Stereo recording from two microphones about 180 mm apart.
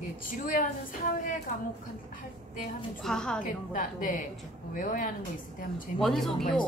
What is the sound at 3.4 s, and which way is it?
A woman's voice, 50° left (ahead or behind).